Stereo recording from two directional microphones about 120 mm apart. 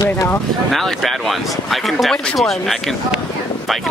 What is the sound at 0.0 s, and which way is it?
Speech, 25° left (ahead or behind).